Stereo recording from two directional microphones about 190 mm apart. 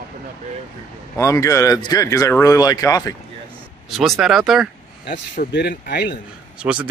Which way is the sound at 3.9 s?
Centre (ahead or behind).